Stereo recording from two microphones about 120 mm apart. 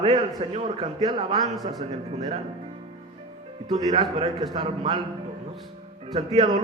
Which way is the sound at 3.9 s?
55° right (ahead or behind).